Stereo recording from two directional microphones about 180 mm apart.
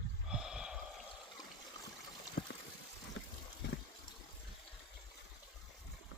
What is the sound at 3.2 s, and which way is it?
Water, 80° left.